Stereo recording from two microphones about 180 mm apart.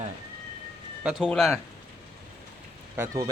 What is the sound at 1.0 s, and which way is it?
Speech, 5° right (ahead or behind).